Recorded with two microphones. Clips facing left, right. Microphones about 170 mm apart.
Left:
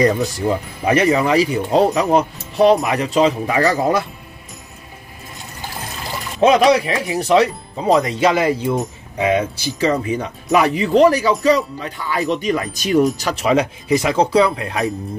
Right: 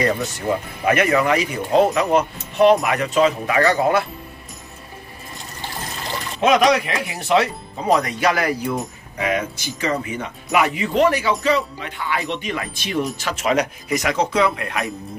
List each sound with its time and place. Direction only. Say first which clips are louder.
0.8 s speech: left 2 dB; 30° left (ahead or behind)
6.4 s speech: left 3 dB; 30° left (ahead or behind)
7.9 s speech: left 3 dB; 25° left (ahead or behind)